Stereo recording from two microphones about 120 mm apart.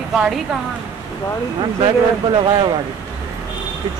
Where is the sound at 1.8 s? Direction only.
40° right (ahead or behind).